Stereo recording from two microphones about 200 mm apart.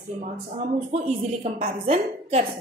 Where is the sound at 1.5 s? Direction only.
30° right (ahead or behind).